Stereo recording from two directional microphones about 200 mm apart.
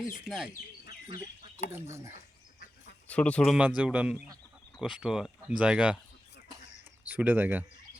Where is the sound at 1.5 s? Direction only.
15° right (ahead or behind).